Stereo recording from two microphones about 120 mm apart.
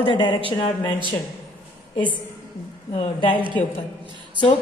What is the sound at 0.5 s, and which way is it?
Speech, 45° left (ahead or behind).